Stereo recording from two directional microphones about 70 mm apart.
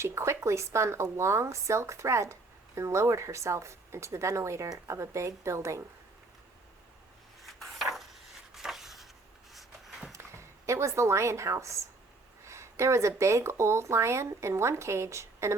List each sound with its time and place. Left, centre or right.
0.0 s speech: right
7.4 s a sound: centre
10.1 s speech: right